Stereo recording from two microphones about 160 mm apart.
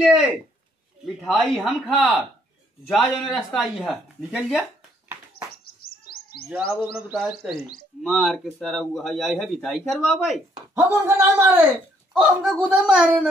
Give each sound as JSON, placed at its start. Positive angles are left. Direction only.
{"t": 0.0, "sound": "a man's voice", "side_deg": -5}
{"t": 5.8, "sound": "chirp", "side_deg": 70}
{"t": 7.0, "sound": "a man's voice", "side_deg": 0}
{"t": 10.7, "sound": "a man's voice", "side_deg": -15}